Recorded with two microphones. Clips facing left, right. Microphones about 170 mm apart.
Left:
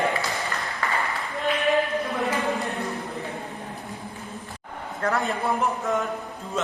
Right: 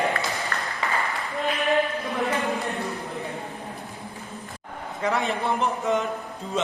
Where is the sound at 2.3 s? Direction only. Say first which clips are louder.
Even; centre (ahead or behind).